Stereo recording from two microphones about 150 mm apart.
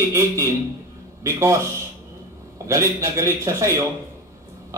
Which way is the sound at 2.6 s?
20° right (ahead or behind).